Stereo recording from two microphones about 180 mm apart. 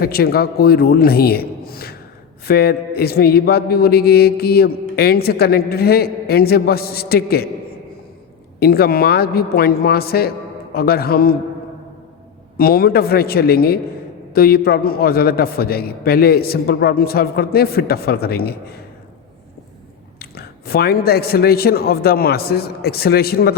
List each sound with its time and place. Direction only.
0.0 s a man's voice: 55° left (ahead or behind)
8.5 s a man's voice: 60° left (ahead or behind)
12.5 s a man's voice: 55° left (ahead or behind)
20.1 s a man's voice: 60° left (ahead or behind)